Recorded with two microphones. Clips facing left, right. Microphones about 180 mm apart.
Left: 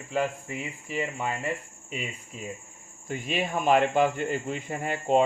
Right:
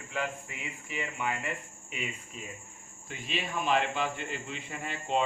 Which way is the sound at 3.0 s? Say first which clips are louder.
Left 7 dB; 45° left (ahead or behind).